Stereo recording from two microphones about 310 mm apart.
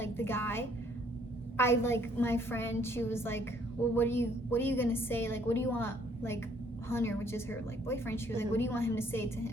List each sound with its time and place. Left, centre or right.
0.0 s music: centre
1.5 s a woman's voice: centre